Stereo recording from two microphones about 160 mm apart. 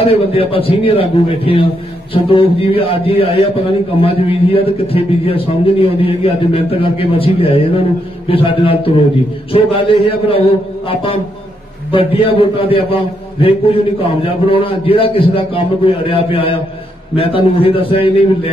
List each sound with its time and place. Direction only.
0.0 s a man's voice: 35° left (ahead or behind)